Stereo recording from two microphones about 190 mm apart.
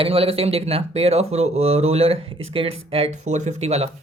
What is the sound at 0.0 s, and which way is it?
Speech, 30° right (ahead or behind).